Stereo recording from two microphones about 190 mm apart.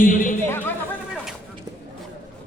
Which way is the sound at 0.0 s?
45° left (ahead or behind).